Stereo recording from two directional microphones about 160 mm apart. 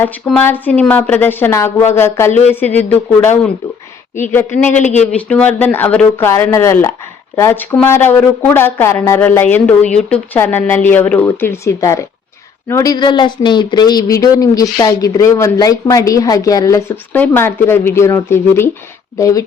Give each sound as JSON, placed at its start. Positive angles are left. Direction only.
{"t": 0.0, "sound": "speech", "side_deg": 10}
{"t": 4.3, "sound": "speech", "side_deg": 10}
{"t": 4.8, "sound": "speech", "side_deg": 45}
{"t": 5.1, "sound": "speech", "side_deg": 10}